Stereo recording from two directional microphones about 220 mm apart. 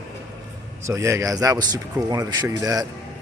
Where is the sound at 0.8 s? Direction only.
15° right (ahead or behind).